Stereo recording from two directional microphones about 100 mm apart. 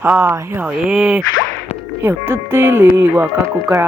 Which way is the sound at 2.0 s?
20° right (ahead or behind).